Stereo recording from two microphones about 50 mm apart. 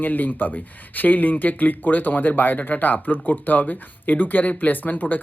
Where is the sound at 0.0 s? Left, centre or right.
Left.